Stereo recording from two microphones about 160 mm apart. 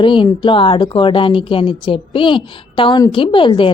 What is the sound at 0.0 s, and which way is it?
A woman's voice, 30° left (ahead or behind).